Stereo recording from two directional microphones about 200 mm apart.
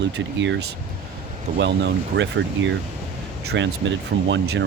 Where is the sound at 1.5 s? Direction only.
60° right (ahead or behind).